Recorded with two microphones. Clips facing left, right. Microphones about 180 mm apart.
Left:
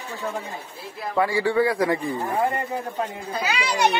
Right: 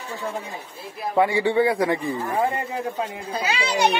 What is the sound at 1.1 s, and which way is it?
Speech, 25° right (ahead or behind).